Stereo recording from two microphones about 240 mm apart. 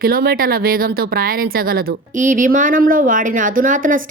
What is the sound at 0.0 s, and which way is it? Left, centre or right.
Speech, right.